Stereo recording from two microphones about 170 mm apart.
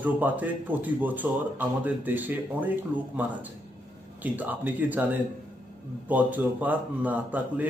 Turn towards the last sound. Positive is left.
turn(degrees=-10)  # may be behind; listen again after turning